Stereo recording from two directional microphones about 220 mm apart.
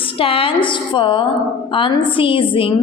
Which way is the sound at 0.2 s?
25° left (ahead or behind).